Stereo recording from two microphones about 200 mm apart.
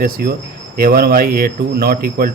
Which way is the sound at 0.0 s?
50° right (ahead or behind).